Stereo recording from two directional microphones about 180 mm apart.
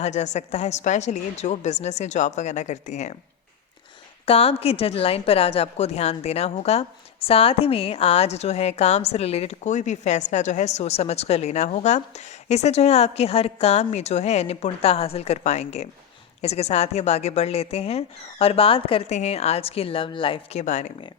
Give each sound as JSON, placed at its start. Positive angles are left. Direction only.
{"t": 0.0, "sound": "a woman's voice", "side_deg": 40}
{"t": 4.3, "sound": "a woman's voice", "side_deg": 35}